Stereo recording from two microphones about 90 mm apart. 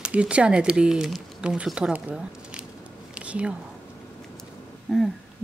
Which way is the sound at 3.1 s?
15° right (ahead or behind).